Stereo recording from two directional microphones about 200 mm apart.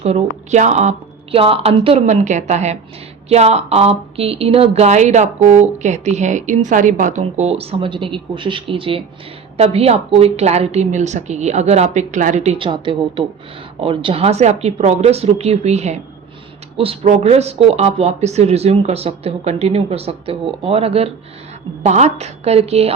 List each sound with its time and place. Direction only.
0.0 s speech: 35° right (ahead or behind)